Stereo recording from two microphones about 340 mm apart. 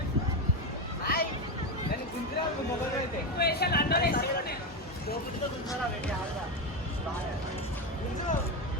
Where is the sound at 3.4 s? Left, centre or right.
Left.